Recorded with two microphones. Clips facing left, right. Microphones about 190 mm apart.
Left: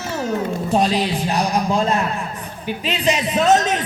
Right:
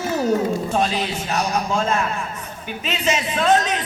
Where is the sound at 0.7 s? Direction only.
35° left (ahead or behind).